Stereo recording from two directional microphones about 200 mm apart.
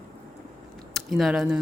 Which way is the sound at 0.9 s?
Centre (ahead or behind).